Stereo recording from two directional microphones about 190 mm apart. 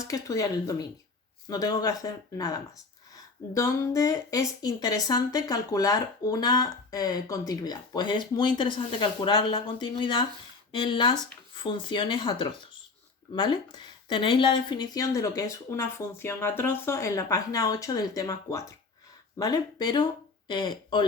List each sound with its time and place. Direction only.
0.0 s speech: 15° left (ahead or behind)